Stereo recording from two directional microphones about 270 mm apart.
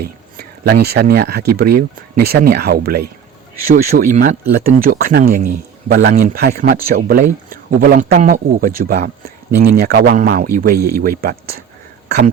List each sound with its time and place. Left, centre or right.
0.3 s speech: right
10.8 s speech: right
11.2 s speech: right